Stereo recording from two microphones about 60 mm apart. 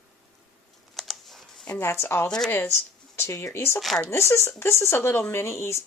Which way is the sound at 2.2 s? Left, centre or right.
Centre.